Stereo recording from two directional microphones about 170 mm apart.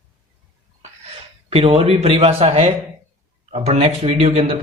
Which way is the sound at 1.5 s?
35° right (ahead or behind).